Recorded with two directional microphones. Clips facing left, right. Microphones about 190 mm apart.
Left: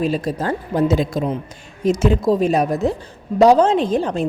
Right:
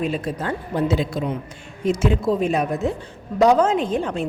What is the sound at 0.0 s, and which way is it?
A woman's voice, 35° left (ahead or behind).